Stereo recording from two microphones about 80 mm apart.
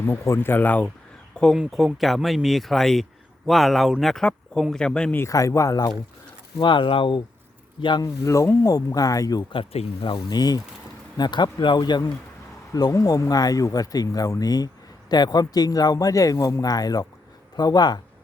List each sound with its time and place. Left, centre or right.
0.0 s speech: left
1.5 s speech: centre
5.3 s speech: left
6.6 s speech: left
7.8 s speech: left
8.0 s speech: left
9.5 s speech: left
11.2 s speech: left
12.7 s speech: left